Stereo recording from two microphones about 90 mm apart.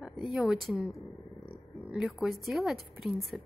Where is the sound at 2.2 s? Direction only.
Centre (ahead or behind).